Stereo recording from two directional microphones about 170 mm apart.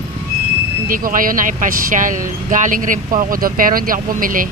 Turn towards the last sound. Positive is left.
turn(degrees=-55)  # may be behind; listen again after turning